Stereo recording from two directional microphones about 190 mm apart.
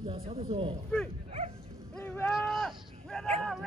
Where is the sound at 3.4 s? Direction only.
Centre (ahead or behind).